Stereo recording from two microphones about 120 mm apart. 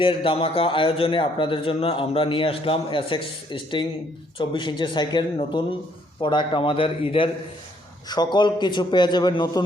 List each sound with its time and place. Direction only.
0.0 s a man's voice: 50° left (ahead or behind)
8.0 s a man's voice: 35° left (ahead or behind)